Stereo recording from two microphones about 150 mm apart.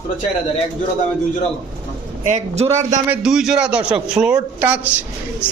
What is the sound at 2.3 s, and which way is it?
Speech, 50° right (ahead or behind).